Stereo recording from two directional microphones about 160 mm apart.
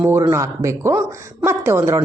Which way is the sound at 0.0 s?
15° right (ahead or behind).